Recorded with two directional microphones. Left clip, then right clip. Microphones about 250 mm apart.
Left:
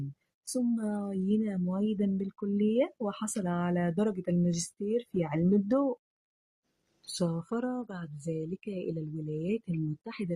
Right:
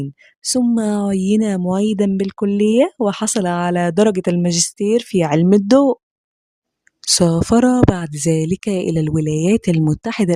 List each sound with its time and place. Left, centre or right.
0.5 s speech: right
7.2 s speech: right